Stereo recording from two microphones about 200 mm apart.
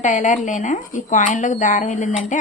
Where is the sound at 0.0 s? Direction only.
40° left (ahead or behind).